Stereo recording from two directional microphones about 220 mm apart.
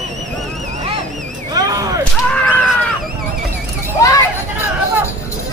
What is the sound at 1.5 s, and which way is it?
Whip, 15° right (ahead or behind).